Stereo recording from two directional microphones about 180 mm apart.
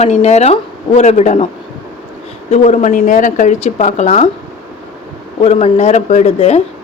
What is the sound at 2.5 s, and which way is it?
Speech, 40° left (ahead or behind).